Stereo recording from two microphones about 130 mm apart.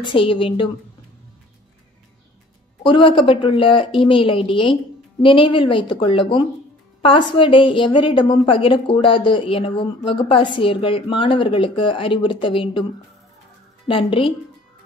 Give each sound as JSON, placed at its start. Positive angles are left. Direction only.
{"t": 0.0, "sound": "a woman's voice", "side_deg": 45}
{"t": 2.8, "sound": "a woman's voice", "side_deg": 40}
{"t": 13.8, "sound": "a woman's voice", "side_deg": 45}